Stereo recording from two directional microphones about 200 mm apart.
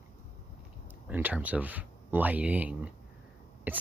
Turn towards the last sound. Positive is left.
turn(degrees=-10)  # may be behind; listen again after turning